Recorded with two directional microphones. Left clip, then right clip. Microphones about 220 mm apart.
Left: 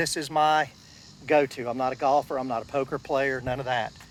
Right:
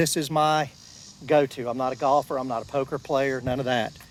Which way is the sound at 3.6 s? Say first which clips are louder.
Right 2 dB; 25° left (ahead or behind).